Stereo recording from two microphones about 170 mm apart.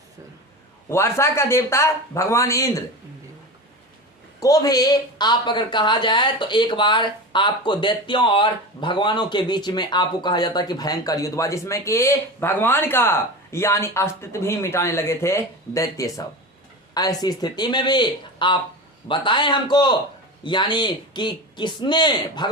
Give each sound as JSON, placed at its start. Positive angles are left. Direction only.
{"t": 0.9, "sound": "speech", "side_deg": 15}
{"t": 4.4, "sound": "a woman's voice", "side_deg": 20}